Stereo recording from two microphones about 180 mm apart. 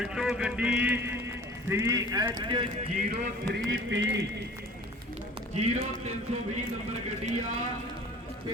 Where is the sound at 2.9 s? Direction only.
40° right (ahead or behind).